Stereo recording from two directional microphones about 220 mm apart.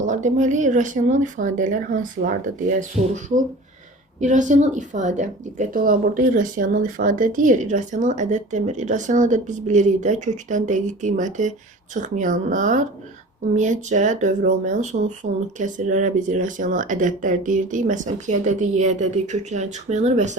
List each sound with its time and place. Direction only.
0.0 s a woman's voice: 35° right (ahead or behind)
4.2 s a woman's voice: 35° right (ahead or behind)